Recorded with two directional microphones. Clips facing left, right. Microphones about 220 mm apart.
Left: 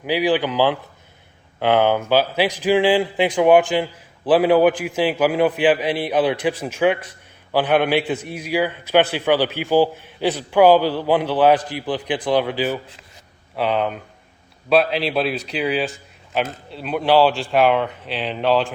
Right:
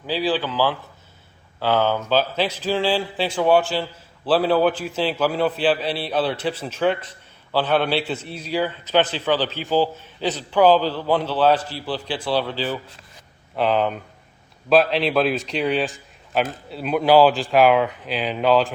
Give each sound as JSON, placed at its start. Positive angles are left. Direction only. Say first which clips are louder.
{"t": 0.0, "sound": "a man's voice", "louder": "left 4 dB", "side_deg": 15}
{"t": 13.6, "sound": "a man's voice", "louder": "right 1 dB", "side_deg": 0}